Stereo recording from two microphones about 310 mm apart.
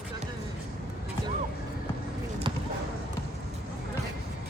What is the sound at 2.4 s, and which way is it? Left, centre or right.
Basketball bounce, centre.